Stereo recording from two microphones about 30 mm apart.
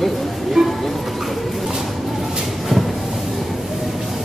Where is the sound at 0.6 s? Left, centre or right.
Right.